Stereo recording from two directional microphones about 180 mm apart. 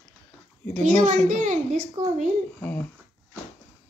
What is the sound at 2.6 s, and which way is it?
Speech, 10° left (ahead or behind).